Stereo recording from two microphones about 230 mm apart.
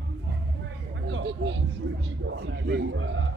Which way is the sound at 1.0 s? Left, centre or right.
Right.